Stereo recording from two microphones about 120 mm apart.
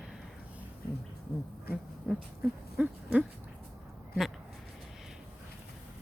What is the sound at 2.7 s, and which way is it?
Hoot, 10° right (ahead or behind).